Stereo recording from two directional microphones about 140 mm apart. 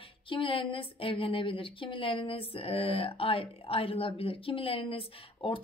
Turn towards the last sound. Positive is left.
turn(degrees=40)  # may be behind; listen again after turning